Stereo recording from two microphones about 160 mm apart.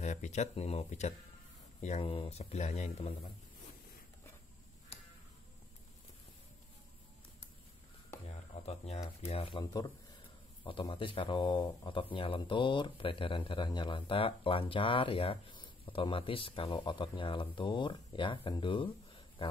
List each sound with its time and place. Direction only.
0.0 s speech: 45° left (ahead or behind)
8.6 s speech: 40° left (ahead or behind)
9.7 s speech: 25° left (ahead or behind)